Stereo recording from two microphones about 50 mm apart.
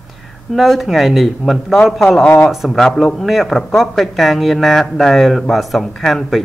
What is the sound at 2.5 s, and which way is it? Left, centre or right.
Speech, centre.